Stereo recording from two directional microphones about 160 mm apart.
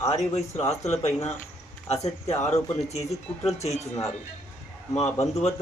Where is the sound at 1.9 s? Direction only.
40° left (ahead or behind).